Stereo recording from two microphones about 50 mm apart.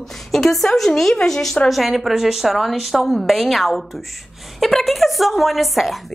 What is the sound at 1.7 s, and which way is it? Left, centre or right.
A woman's voice, centre.